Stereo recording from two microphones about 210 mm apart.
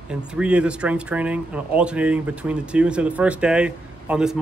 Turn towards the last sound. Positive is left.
turn(degrees=-5)  # may be behind; listen again after turning